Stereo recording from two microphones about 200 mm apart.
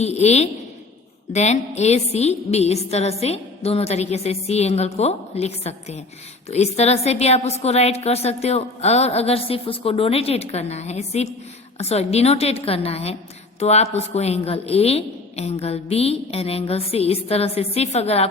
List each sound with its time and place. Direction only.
0.0 s a woman's voice: 35° left (ahead or behind)